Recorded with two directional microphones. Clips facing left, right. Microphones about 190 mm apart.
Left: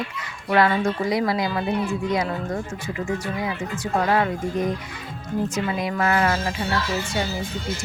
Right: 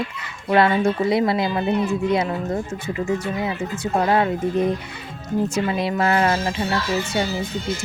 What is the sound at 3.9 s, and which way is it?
Speech, 25° right (ahead or behind).